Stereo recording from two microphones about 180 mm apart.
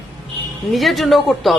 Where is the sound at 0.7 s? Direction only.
Centre (ahead or behind).